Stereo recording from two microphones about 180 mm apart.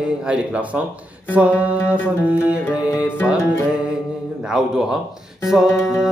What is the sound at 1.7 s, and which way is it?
Music, 10° left (ahead or behind).